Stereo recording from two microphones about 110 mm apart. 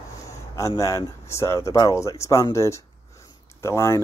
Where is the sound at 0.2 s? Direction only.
30° left (ahead or behind).